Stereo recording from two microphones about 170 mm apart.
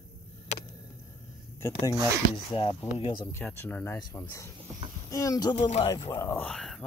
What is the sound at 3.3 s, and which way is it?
Speech, 15° left (ahead or behind).